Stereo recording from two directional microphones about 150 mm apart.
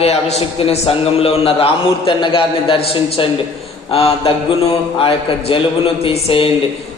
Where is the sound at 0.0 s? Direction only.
45° left (ahead or behind).